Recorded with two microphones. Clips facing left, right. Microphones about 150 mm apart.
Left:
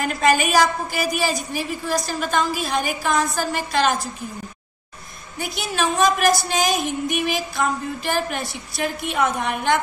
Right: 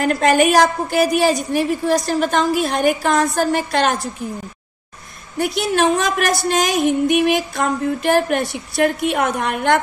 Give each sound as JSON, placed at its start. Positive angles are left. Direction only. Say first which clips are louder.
{"t": 0.0, "sound": "a woman's voice", "louder": "right 5 dB", "side_deg": -55}
{"t": 5.4, "sound": "a woman's voice", "louder": "right 7 dB", "side_deg": -60}